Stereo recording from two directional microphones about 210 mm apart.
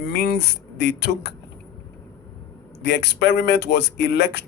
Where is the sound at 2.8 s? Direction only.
55° left (ahead or behind).